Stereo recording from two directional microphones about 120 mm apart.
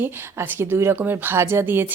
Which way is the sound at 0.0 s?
15° right (ahead or behind).